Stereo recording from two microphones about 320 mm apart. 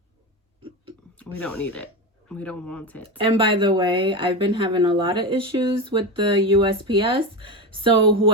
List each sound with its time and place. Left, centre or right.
1.4 s speech: centre
3.2 s a woman's voice: centre